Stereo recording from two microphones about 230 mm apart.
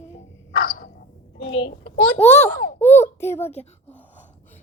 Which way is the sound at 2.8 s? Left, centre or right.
Centre.